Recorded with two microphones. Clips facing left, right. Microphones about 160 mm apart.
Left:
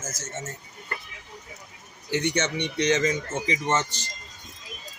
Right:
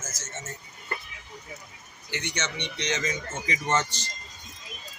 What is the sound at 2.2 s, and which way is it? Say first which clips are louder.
Speech: left 8 dB; 55° left (ahead or behind).